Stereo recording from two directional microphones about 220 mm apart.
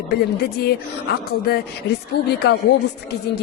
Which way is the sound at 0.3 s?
45° left (ahead or behind).